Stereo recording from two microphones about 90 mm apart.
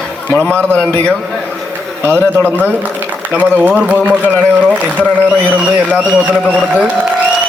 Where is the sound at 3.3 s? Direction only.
20° right (ahead or behind).